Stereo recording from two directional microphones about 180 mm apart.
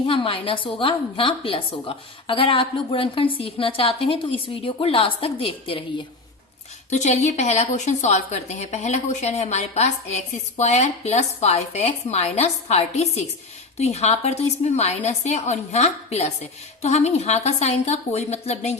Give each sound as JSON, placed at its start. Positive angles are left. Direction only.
{"t": 0.1, "sound": "a woman's voice", "side_deg": 30}
{"t": 6.9, "sound": "a woman's voice", "side_deg": 40}